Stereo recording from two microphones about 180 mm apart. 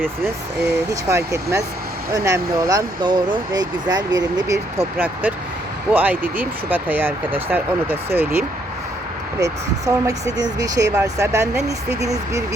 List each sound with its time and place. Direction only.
1.0 s speech: 15° right (ahead or behind)
9.4 s speech: 20° right (ahead or behind)